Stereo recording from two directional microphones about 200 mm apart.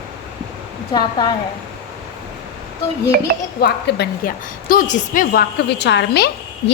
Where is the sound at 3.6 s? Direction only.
55° left (ahead or behind).